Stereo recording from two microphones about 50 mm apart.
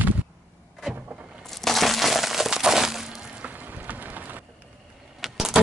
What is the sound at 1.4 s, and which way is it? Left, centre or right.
Crushing, centre.